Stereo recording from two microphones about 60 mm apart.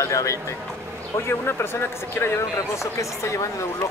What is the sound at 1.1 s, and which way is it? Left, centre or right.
Speech, left.